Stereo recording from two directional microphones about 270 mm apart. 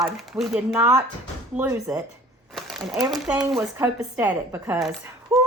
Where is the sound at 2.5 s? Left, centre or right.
Centre.